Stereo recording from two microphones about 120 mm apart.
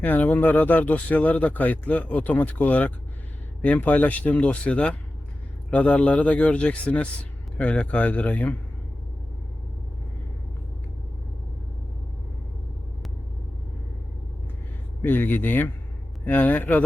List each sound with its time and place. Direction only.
0.0 s speech: 15° left (ahead or behind)
15.0 s speech: 15° left (ahead or behind)